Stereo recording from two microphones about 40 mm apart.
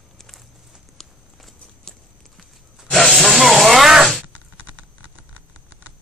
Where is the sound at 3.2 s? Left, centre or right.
Centre.